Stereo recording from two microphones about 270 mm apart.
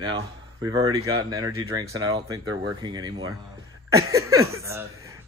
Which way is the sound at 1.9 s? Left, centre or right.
Right.